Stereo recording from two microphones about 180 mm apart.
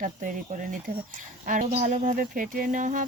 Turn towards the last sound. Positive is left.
turn(degrees=-45)  # may be behind; listen again after turning